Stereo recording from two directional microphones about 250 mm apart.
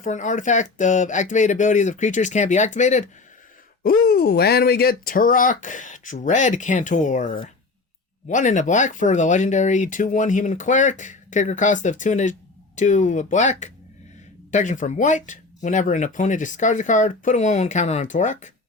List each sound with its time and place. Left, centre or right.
0.0 s speech: left